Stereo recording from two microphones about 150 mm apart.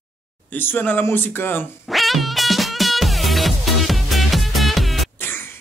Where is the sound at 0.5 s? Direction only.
15° left (ahead or behind).